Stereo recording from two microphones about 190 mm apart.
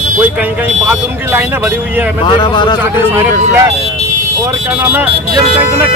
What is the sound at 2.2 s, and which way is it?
Speech, 25° left (ahead or behind).